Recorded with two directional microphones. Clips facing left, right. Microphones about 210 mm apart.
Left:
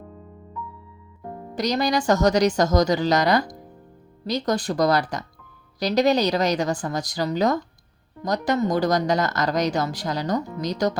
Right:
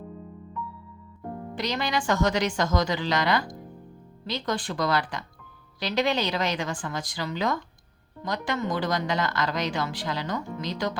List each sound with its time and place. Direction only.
1.5 s speech: 40° left (ahead or behind)